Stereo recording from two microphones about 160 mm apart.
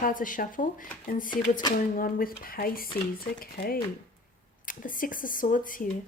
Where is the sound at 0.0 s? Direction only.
55° left (ahead or behind).